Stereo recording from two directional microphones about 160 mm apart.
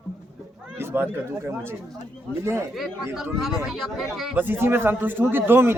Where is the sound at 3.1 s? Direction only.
Centre (ahead or behind).